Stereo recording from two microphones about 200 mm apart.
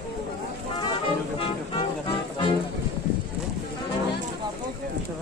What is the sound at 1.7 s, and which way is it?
Music, 25° left (ahead or behind).